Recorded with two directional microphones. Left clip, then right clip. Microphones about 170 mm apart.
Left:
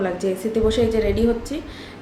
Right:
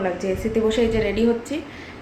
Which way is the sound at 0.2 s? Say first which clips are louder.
Left 1 dB; 15° left (ahead or behind).